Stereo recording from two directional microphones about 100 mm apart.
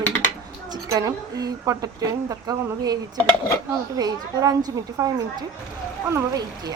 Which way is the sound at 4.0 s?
40° right (ahead or behind).